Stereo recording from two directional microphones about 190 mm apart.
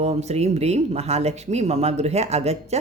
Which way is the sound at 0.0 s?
35° right (ahead or behind).